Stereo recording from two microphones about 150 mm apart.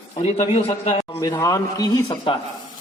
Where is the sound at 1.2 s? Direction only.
25° left (ahead or behind).